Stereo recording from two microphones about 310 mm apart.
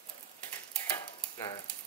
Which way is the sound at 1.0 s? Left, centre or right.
Centre.